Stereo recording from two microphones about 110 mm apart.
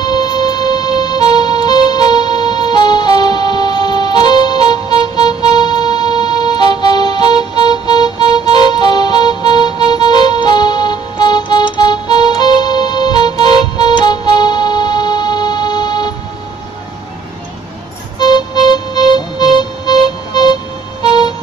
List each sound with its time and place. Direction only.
0.0 s music: 40° left (ahead or behind)
18.2 s music: 40° left (ahead or behind)